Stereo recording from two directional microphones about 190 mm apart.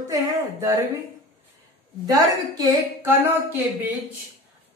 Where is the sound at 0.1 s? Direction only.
15° right (ahead or behind).